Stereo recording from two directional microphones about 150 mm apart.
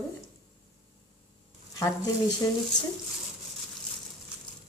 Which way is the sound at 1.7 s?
20° left (ahead or behind).